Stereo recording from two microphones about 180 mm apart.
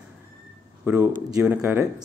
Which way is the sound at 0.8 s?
15° right (ahead or behind).